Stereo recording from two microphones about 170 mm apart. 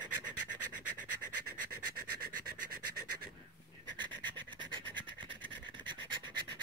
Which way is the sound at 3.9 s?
25° right (ahead or behind).